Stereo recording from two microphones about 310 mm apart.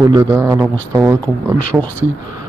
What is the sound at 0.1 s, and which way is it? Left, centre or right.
Speech, centre.